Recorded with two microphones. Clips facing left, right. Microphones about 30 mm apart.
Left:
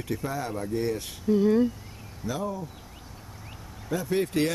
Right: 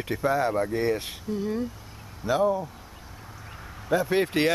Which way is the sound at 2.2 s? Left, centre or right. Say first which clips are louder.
Right 8 dB; right.